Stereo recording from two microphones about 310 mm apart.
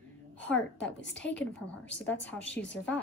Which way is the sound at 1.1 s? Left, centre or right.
Centre.